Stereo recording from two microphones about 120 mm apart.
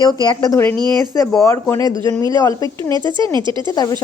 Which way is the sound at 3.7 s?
30° left (ahead or behind).